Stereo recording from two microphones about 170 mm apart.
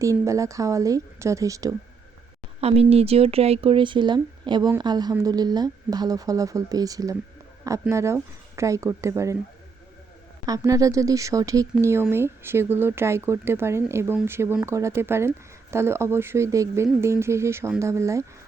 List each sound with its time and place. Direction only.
0.0 s speech: 20° right (ahead or behind)
2.6 s speech: 35° right (ahead or behind); by 9.4 s 15° right (ahead or behind)
10.4 s speech: 20° right (ahead or behind)